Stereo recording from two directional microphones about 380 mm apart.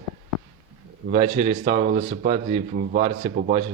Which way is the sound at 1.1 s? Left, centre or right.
Centre.